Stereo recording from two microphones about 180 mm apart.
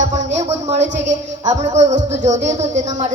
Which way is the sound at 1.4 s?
20° right (ahead or behind).